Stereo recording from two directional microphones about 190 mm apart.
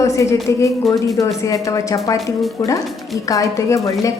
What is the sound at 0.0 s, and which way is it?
A woman's voice, 15° left (ahead or behind).